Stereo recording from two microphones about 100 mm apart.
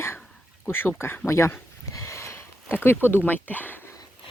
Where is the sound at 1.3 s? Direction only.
30° left (ahead or behind).